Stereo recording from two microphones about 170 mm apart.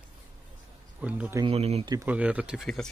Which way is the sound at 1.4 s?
35° right (ahead or behind).